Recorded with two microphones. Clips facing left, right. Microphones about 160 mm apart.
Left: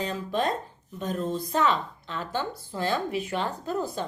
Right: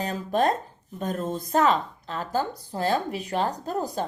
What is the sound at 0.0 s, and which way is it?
A woman's voice, 45° right (ahead or behind).